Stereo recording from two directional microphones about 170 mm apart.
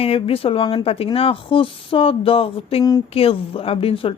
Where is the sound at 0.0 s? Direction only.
35° left (ahead or behind).